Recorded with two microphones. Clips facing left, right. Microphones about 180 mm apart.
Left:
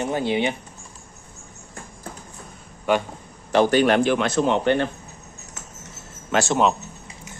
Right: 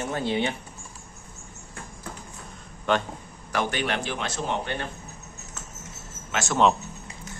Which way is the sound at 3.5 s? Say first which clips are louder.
Left 10 dB; 40° left (ahead or behind).